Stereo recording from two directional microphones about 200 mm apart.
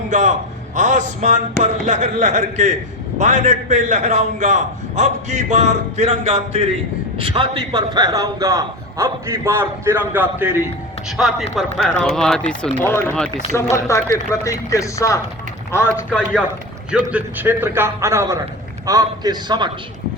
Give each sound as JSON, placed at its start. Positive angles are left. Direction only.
{"t": 0.1, "sound": "a man's voice", "side_deg": -40}
{"t": 17.1, "sound": "a man's voice", "side_deg": -10}